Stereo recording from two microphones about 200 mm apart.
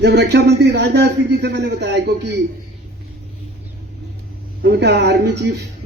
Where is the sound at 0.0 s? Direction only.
60° right (ahead or behind).